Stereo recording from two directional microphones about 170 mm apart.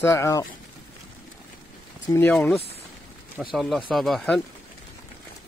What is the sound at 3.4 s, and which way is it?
Speech, centre (ahead or behind).